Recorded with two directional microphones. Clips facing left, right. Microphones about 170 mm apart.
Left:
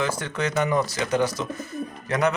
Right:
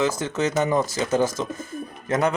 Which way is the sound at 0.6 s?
25° right (ahead or behind).